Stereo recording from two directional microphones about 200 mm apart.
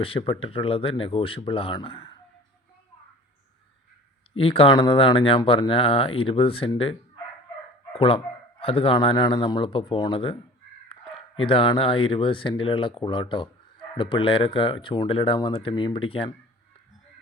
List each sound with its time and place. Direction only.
0.0 s speech: 25° left (ahead or behind)
4.4 s speech: 30° left (ahead or behind)
7.9 s speech: 30° left (ahead or behind)
11.3 s speech: 25° left (ahead or behind)